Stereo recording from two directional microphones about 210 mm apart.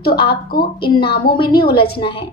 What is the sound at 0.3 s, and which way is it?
Speech, 45° left (ahead or behind).